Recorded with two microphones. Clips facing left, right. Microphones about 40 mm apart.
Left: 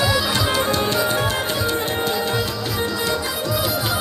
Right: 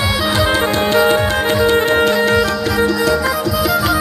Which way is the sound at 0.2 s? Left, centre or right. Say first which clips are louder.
Right 5 dB; right.